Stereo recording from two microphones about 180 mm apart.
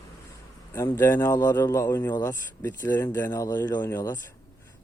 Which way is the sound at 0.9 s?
15° left (ahead or behind).